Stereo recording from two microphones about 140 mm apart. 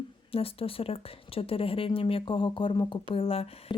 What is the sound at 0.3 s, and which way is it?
Speech, 40° left (ahead or behind).